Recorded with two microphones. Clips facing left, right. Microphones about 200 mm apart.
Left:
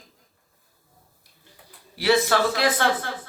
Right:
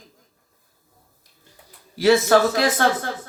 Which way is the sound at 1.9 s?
45° right (ahead or behind).